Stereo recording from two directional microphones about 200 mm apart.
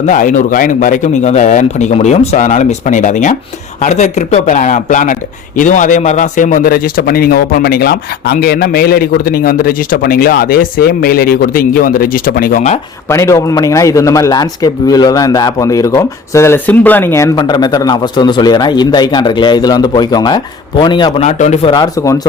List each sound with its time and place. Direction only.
0.0 s a man's voice: 40° left (ahead or behind)
13.1 s a man's voice: 15° left (ahead or behind)
21.2 s a man's voice: 35° left (ahead or behind); by 22.3 s 15° left (ahead or behind)